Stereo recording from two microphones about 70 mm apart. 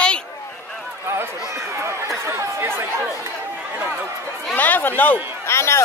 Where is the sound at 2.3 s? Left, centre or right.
Right.